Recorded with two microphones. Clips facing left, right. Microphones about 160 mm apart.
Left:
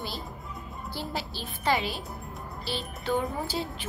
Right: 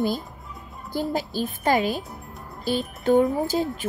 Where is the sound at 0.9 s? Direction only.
45° right (ahead or behind).